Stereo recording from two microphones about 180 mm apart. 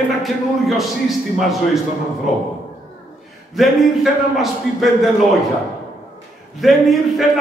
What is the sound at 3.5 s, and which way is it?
A man's voice, centre (ahead or behind).